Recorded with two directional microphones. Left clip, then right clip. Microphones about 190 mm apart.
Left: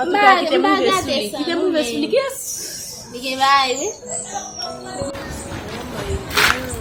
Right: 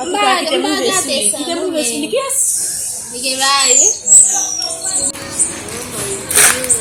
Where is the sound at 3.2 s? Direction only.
15° left (ahead or behind).